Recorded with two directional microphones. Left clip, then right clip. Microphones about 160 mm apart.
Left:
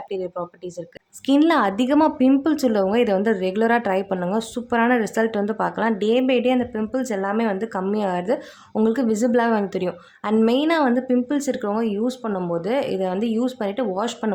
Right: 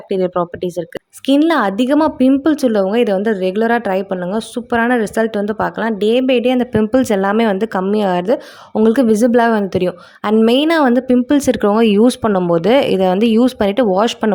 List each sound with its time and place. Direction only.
0.2 s speech: 50° right (ahead or behind)
1.3 s speech: 30° right (ahead or behind)
6.6 s a woman's voice: 55° right (ahead or behind)